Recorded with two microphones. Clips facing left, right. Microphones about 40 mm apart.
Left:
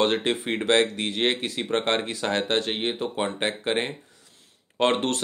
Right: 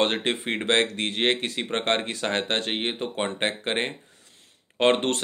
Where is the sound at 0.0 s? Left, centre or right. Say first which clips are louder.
Left 1 dB; right.